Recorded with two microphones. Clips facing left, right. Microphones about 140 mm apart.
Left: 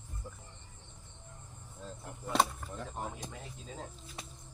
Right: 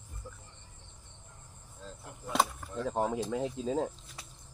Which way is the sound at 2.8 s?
90° right.